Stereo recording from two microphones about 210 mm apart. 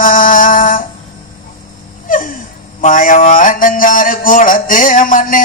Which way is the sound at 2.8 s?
40° left (ahead or behind).